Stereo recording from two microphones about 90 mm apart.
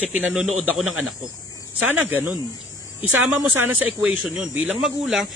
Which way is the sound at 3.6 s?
20° right (ahead or behind).